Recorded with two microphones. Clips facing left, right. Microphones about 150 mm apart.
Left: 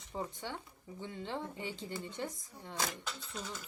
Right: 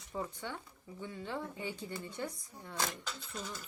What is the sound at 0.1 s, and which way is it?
Speech, 25° left (ahead or behind).